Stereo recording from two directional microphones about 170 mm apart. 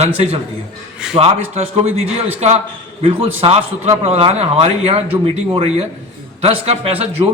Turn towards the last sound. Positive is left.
turn(degrees=-35)  # may be behind; listen again after turning